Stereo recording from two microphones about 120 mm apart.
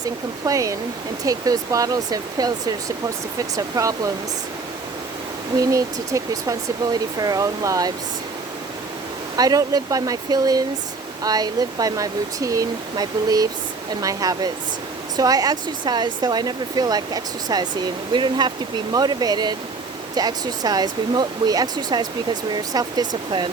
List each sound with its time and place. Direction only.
0.0 s speech: 30° right (ahead or behind)
5.5 s speech: 25° right (ahead or behind)
9.3 s speech: 30° right (ahead or behind)